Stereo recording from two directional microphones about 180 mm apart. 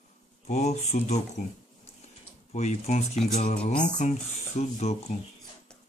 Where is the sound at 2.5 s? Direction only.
40° left (ahead or behind).